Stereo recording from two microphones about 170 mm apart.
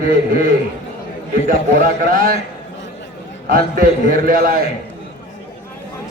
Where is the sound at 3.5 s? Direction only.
55° right (ahead or behind).